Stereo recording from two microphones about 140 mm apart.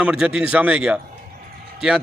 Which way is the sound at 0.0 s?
5° right (ahead or behind).